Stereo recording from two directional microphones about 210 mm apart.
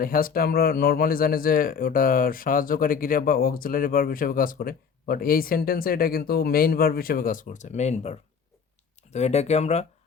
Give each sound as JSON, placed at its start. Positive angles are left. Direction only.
{"t": 0.0, "sound": "speech", "side_deg": 45}